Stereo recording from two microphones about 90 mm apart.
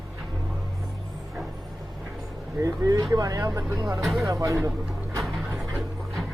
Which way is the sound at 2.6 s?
40° right (ahead or behind).